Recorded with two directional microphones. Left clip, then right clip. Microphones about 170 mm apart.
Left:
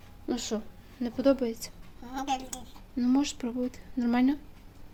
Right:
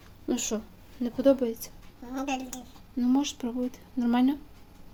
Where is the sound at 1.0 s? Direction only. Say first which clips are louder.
Right 2 dB; centre (ahead or behind).